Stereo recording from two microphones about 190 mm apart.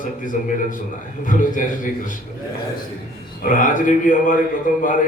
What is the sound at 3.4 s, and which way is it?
A man's voice, 45° left (ahead or behind).